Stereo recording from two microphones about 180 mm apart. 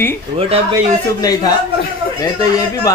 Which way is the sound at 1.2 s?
20° left (ahead or behind).